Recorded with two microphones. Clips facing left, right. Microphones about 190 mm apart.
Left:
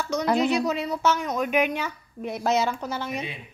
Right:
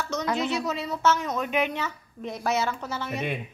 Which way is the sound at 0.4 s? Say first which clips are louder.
Left 5 dB; 15° left (ahead or behind).